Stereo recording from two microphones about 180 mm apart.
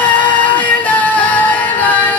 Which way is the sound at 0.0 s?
10° left (ahead or behind).